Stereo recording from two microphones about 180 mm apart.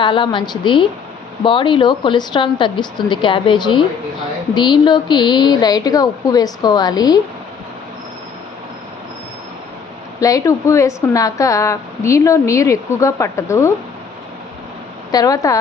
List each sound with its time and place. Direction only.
0.0 s a woman's voice: 25° left (ahead or behind)
10.2 s speech: 20° left (ahead or behind)
15.1 s a woman's voice: 20° left (ahead or behind)